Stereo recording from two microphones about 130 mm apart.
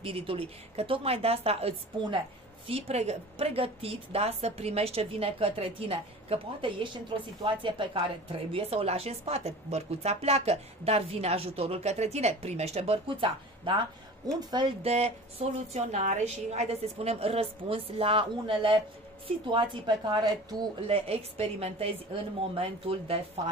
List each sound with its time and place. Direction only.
0.0 s a woman's voice: 45° right (ahead or behind)
14.8 s a woman's voice: 55° right (ahead or behind); by 20.6 s 30° right (ahead or behind)
20.8 s a woman's voice: 50° right (ahead or behind)